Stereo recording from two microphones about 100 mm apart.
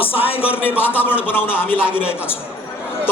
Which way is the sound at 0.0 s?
70° left (ahead or behind).